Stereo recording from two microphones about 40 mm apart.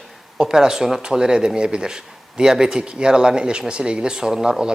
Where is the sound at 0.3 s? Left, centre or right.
Centre.